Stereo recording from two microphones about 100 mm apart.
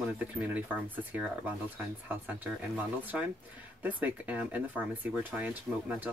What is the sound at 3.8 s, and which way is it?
Speech, 15° right (ahead or behind).